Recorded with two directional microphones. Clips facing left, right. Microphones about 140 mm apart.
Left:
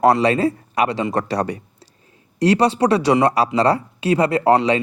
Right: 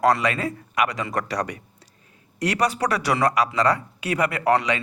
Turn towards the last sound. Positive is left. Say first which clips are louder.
# left 6 dB
turn(degrees=30)  # may be behind; listen again after turning